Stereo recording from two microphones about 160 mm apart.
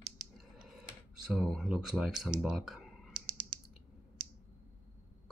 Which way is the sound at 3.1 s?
30° right (ahead or behind).